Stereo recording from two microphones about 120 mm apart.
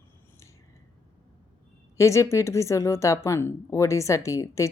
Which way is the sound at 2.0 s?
25° left (ahead or behind).